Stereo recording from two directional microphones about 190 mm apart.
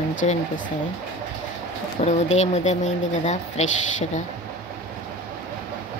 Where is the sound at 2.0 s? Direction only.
35° left (ahead or behind).